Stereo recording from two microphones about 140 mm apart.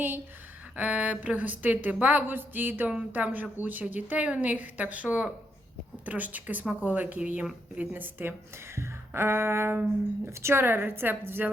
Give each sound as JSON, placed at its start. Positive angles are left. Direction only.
{"t": 0.8, "sound": "speech", "side_deg": -10}